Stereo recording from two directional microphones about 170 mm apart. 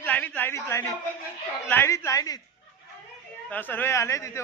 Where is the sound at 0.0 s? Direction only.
10° left (ahead or behind).